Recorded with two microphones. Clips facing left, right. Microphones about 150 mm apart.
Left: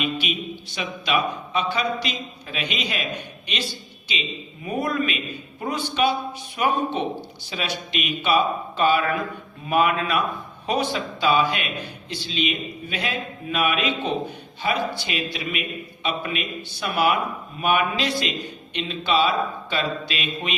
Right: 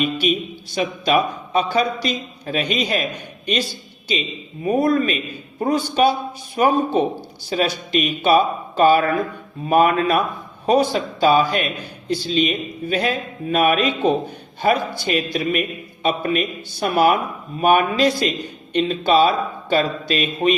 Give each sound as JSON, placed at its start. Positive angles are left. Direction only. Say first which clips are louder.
{"t": 0.0, "sound": "a man's voice", "louder": "right 6 dB", "side_deg": -40}
{"t": 4.6, "sound": "a man's voice", "louder": "right 7 dB", "side_deg": -40}